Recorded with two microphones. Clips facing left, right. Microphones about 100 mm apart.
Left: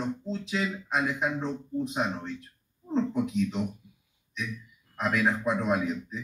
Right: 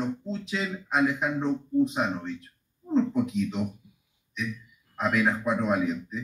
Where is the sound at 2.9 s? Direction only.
Centre (ahead or behind).